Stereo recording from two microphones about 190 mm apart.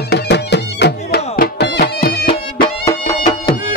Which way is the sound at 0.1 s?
60° left (ahead or behind).